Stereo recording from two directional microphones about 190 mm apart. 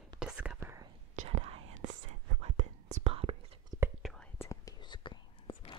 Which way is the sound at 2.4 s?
35° right (ahead or behind).